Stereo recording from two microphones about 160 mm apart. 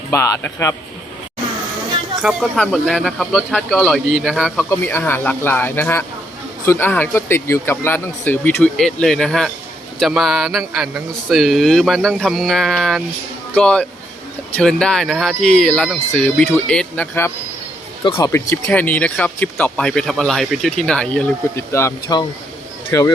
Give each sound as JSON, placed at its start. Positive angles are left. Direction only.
{"t": 0.1, "sound": "speech", "side_deg": 15}
{"t": 2.2, "sound": "speech", "side_deg": 0}
{"t": 4.7, "sound": "speech", "side_deg": 15}
{"t": 18.0, "sound": "speech", "side_deg": 30}
{"t": 18.3, "sound": "speech", "side_deg": 15}
{"t": 21.5, "sound": "speech", "side_deg": 15}